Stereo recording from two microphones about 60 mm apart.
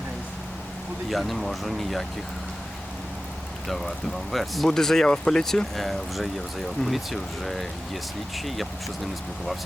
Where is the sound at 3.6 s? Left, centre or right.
Centre.